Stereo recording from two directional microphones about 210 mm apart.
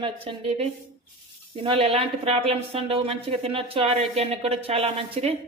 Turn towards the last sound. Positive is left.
turn(degrees=-30)  # may be behind; listen again after turning